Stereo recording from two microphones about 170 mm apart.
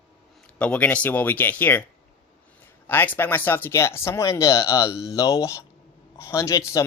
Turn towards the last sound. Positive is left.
turn(degrees=20)  # may be behind; listen again after turning